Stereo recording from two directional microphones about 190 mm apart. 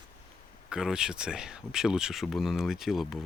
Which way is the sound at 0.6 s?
5° right (ahead or behind).